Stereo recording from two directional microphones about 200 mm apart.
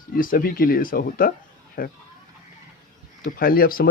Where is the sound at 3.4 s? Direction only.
45° left (ahead or behind).